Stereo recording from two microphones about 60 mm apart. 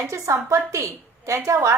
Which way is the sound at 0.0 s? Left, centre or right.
Right.